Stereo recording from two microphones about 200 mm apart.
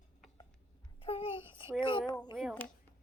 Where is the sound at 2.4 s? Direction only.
Centre (ahead or behind).